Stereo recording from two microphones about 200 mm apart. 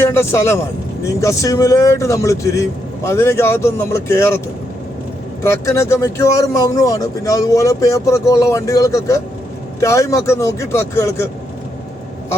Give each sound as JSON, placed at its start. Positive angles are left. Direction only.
{"t": 0.0, "sound": "speech", "side_deg": 10}
{"t": 5.4, "sound": "speech", "side_deg": 15}